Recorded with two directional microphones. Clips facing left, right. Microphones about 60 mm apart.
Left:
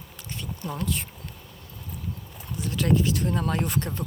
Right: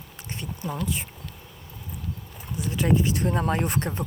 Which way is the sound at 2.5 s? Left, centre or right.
Centre.